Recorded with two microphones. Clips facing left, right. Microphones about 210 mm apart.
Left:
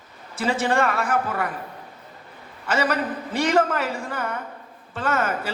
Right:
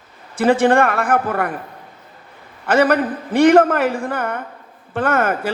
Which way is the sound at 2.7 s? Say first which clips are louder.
Right 8 dB; 55° right (ahead or behind).